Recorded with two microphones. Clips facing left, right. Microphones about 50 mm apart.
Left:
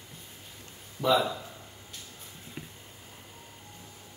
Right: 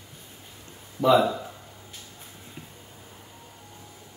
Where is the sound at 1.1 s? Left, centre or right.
Right.